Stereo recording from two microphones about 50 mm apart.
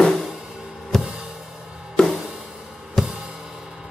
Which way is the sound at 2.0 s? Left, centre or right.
Centre.